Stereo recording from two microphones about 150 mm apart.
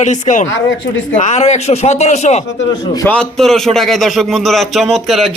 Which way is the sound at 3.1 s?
5° left (ahead or behind).